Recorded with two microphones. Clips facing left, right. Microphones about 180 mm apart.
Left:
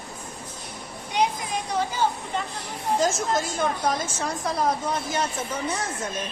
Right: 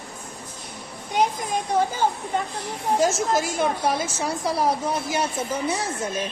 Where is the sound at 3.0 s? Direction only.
10° right (ahead or behind).